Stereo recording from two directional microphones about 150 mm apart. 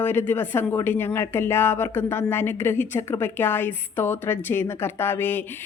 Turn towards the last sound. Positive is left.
turn(degrees=15)  # may be behind; listen again after turning